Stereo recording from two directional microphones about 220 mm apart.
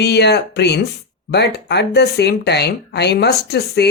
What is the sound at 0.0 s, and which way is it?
Speech, 50° left (ahead or behind).